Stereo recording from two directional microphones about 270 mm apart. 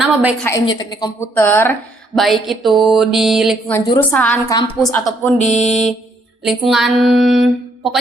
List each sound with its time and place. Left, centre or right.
0.0 s a woman's voice: centre
0.4 s a woman's voice: centre
3.8 s a woman's voice: centre
4.1 s a woman's voice: centre
4.8 s speech: centre
5.4 s music: left
6.4 s speech: centre